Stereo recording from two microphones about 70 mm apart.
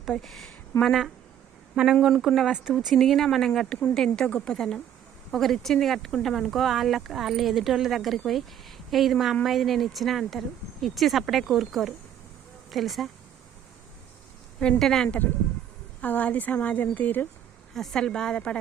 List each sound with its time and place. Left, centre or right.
0.1 s speech: centre
1.7 s speech: centre
14.6 s speech: centre
16.0 s a woman's voice: left
17.7 s speech: centre